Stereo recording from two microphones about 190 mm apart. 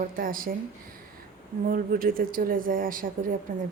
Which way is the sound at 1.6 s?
50° right (ahead or behind).